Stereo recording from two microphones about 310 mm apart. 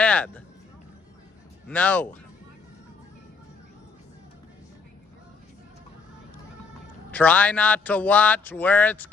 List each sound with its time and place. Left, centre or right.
0.0 s a sound: centre
1.7 s a man's voice: centre
7.1 s a man's voice: centre